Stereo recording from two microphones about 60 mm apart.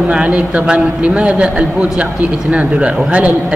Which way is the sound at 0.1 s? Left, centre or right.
Right.